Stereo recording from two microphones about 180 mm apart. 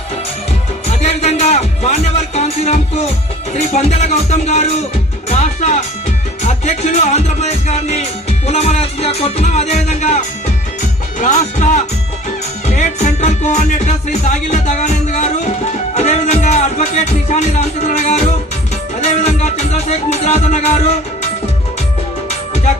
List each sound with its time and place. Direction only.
0.9 s music: 35° left (ahead or behind)